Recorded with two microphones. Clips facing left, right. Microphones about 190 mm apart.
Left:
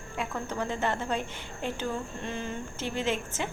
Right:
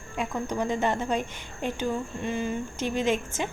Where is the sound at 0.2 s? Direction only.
15° right (ahead or behind).